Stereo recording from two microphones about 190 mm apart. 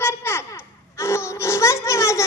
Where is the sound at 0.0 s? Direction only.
15° left (ahead or behind).